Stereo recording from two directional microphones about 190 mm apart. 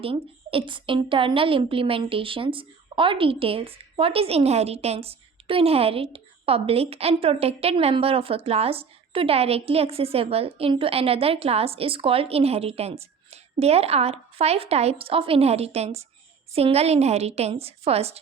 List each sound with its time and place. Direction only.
0.0 s a woman's voice: 30° right (ahead or behind)